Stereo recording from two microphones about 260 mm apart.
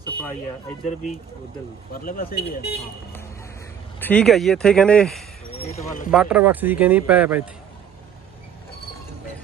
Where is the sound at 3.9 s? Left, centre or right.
Centre.